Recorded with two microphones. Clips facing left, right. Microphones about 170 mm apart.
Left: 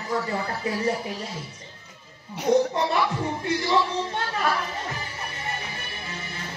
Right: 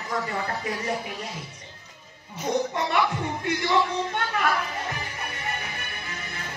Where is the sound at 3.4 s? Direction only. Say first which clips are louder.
Even; 30° left (ahead or behind).